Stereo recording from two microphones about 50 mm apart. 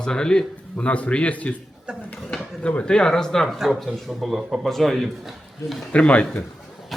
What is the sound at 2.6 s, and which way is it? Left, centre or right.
Speech, left.